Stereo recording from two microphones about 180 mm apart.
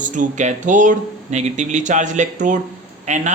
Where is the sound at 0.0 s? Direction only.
45° right (ahead or behind).